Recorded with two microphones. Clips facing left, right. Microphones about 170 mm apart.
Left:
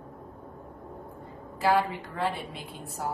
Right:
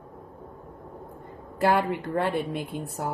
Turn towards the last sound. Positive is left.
turn(degrees=-55)  # may be behind; listen again after turning